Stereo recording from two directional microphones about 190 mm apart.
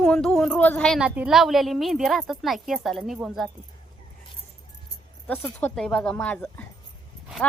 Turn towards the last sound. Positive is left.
turn(degrees=0)  # may be behind; listen again after turning